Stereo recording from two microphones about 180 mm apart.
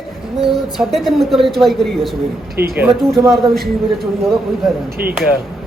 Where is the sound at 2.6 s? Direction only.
60° right (ahead or behind).